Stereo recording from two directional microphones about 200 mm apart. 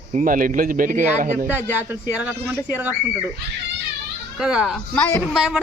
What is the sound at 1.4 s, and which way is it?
Speech, 10° right (ahead or behind).